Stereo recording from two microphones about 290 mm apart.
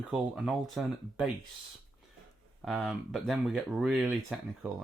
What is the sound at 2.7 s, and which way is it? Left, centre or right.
Speech, centre.